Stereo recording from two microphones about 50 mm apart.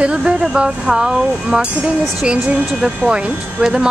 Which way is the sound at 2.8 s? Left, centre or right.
Centre.